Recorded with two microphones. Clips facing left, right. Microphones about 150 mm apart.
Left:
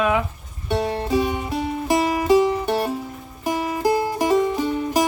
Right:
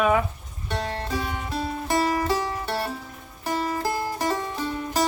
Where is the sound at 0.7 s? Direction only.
15° left (ahead or behind).